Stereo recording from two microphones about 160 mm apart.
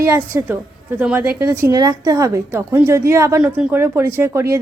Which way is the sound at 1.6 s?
25° right (ahead or behind).